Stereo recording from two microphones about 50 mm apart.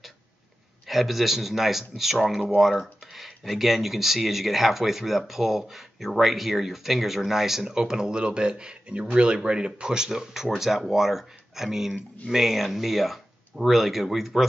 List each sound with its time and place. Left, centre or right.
0.8 s speech: centre